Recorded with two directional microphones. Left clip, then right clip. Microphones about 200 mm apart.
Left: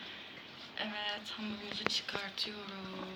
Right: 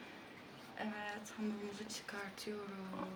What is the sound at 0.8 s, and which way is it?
Speech, 30° right (ahead or behind).